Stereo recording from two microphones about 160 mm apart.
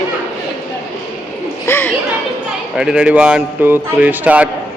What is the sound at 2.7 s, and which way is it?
Speech, 5° right (ahead or behind).